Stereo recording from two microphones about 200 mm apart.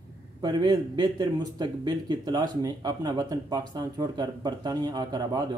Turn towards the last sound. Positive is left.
turn(degrees=-20)  # may be behind; listen again after turning